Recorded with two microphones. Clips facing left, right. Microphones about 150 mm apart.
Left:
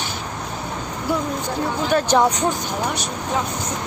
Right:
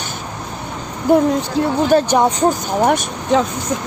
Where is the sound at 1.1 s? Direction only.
50° right (ahead or behind).